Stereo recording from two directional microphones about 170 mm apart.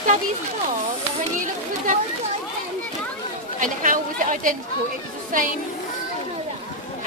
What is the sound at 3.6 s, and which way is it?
Speech, 50° right (ahead or behind).